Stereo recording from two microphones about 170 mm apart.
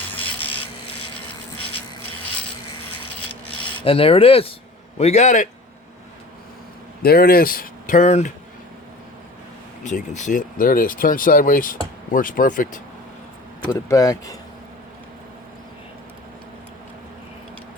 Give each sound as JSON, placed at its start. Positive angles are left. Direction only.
{"t": 0.2, "sound": "a sound", "side_deg": 10}
{"t": 3.8, "sound": "speech", "side_deg": 35}
{"t": 7.0, "sound": "speech", "side_deg": 65}
{"t": 9.8, "sound": "speech", "side_deg": 45}
{"t": 13.7, "sound": "speech", "side_deg": 20}